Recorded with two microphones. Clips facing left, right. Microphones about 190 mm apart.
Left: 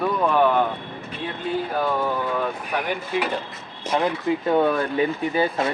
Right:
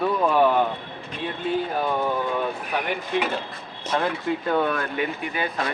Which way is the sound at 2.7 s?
Centre (ahead or behind).